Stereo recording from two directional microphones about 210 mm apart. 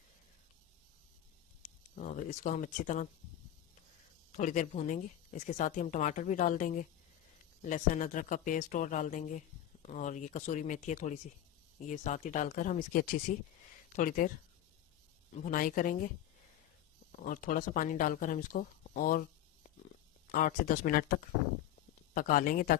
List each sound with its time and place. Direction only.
1.6 s speech: 35° left (ahead or behind)
4.3 s a woman's voice: 35° left (ahead or behind)
15.4 s a woman's voice: 40° left (ahead or behind)
17.1 s a woman's voice: 40° left (ahead or behind)